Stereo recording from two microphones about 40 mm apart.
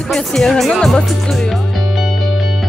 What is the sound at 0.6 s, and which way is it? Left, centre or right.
Speech, centre.